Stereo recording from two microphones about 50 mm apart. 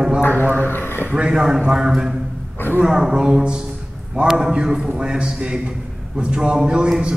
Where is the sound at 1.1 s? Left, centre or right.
Centre.